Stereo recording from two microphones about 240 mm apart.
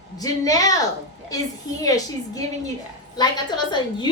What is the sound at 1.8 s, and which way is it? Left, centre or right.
A woman's voice, centre.